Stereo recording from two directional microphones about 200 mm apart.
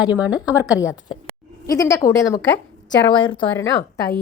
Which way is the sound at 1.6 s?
15° left (ahead or behind).